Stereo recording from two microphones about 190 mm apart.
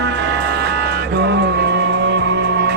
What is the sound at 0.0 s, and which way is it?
Music, 65° right (ahead or behind).